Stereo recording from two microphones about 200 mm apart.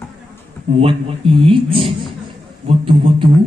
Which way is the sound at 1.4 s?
25° right (ahead or behind).